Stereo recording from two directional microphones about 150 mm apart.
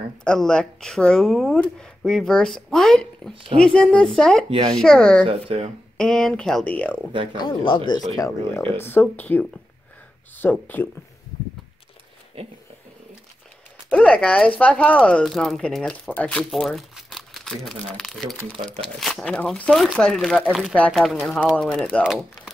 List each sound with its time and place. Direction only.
0.2 s speech: 5° left (ahead or behind)
5.2 s speech: 40° right (ahead or behind)
5.9 s speech: 5° left (ahead or behind)
7.3 s speech: 30° left (ahead or behind)
8.7 s speech: 15° left (ahead or behind)
12.4 s speech: 40° right (ahead or behind)
13.9 s speech: 10° left (ahead or behind)